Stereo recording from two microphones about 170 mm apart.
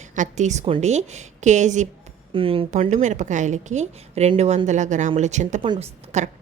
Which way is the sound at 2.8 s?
45° right (ahead or behind).